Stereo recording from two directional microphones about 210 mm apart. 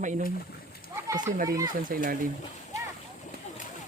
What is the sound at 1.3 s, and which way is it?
Speech, 45° right (ahead or behind).